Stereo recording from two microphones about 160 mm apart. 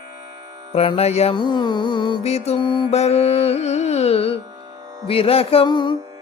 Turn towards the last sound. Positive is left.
turn(degrees=30)  # may be behind; listen again after turning